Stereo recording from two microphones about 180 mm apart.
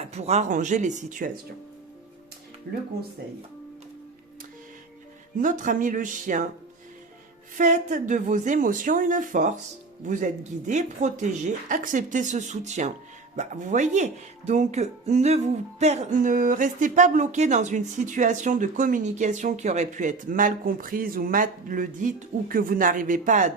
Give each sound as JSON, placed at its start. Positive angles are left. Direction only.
{"t": 0.0, "sound": "speech", "side_deg": -35}
{"t": 5.4, "sound": "speech", "side_deg": -45}
{"t": 7.5, "sound": "speech", "side_deg": -45}